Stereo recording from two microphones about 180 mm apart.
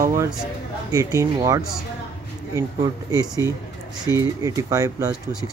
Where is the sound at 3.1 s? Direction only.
20° right (ahead or behind).